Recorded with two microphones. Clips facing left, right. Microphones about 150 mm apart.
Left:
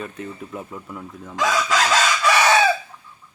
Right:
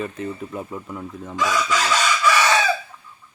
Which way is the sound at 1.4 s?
80° left.